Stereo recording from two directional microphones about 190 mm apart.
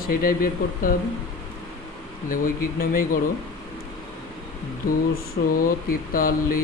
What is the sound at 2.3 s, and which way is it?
Speech, 50° left (ahead or behind).